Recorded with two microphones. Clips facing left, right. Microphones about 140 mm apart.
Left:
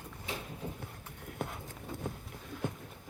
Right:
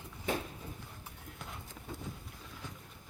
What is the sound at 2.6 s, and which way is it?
Boat, 55° left (ahead or behind).